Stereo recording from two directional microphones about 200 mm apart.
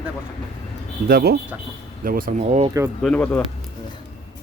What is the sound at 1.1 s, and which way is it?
Speech, 50° right (ahead or behind).